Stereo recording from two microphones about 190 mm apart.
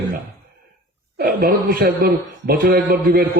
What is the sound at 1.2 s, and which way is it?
A man's voice, 50° right (ahead or behind).